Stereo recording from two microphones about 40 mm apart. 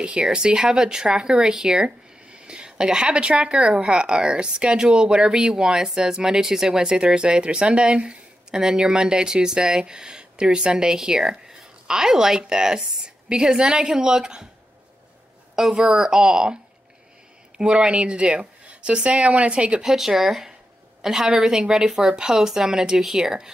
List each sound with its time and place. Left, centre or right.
0.2 s a woman's voice: right
15.7 s speech: right
17.6 s speech: right
19.8 s a woman's voice: centre